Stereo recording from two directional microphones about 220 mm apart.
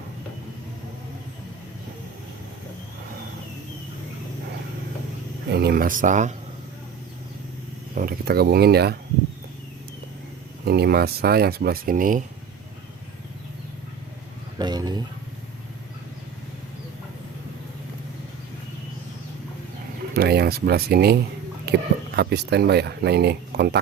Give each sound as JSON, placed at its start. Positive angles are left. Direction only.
{"t": 5.5, "sound": "speech", "side_deg": -45}
{"t": 7.9, "sound": "speech", "side_deg": -40}
{"t": 10.7, "sound": "speech", "side_deg": -45}
{"t": 14.6, "sound": "a sound", "side_deg": -20}
{"t": 20.1, "sound": "speech", "side_deg": -45}